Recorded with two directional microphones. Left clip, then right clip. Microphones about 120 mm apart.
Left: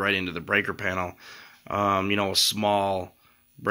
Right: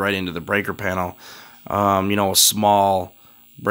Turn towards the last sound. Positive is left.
turn(degrees=-65)  # may be behind; listen again after turning